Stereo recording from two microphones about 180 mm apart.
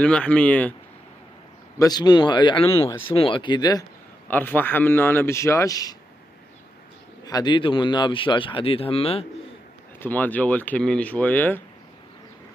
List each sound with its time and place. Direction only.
0.0 s speech: 5° left (ahead or behind)
1.8 s speech: 25° left (ahead or behind)
4.3 s speech: 10° left (ahead or behind)
7.2 s speech: 25° left (ahead or behind)
9.9 s speech: 10° left (ahead or behind)